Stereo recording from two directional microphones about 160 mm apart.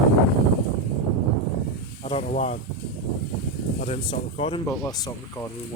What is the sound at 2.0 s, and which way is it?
Speech, 40° left (ahead or behind).